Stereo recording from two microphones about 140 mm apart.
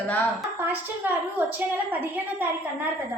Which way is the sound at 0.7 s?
10° right (ahead or behind).